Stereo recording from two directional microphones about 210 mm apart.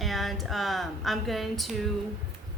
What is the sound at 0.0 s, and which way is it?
Speech, centre (ahead or behind).